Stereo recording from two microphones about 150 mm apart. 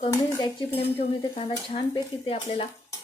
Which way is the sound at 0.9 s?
40° left (ahead or behind).